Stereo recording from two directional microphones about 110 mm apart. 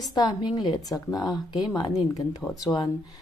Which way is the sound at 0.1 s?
40° left (ahead or behind).